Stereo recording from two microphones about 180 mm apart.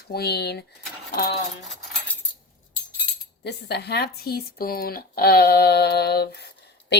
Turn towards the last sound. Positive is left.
turn(degrees=65)  # may be behind; listen again after turning